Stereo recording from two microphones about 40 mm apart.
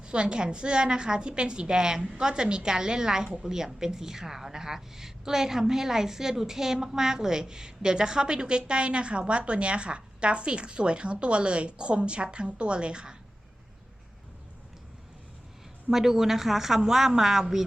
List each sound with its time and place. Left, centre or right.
0.0 s a woman's voice: right
15.9 s speech: centre